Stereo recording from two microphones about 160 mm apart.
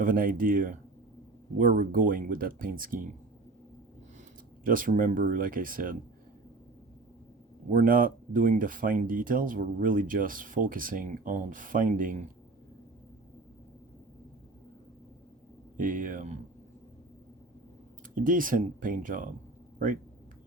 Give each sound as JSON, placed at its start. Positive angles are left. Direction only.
{"t": 0.0, "sound": "speech", "side_deg": -60}
{"t": 4.6, "sound": "speech", "side_deg": -60}
{"t": 7.7, "sound": "speech", "side_deg": -60}
{"t": 15.8, "sound": "speech", "side_deg": -55}
{"t": 18.1, "sound": "speech", "side_deg": -60}